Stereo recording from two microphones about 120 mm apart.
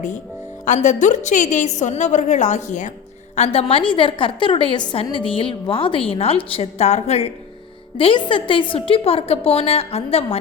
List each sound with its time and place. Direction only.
0.6 s a woman's voice: 90° left
3.3 s a woman's voice: 60° left (ahead or behind)
7.9 s a woman's voice: 45° left (ahead or behind)